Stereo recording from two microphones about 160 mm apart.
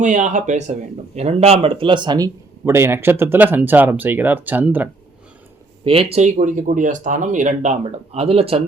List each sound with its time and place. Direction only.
0.0 s speech: 50° right (ahead or behind); by 4.9 s 10° right (ahead or behind)
5.8 s speech: 35° right (ahead or behind)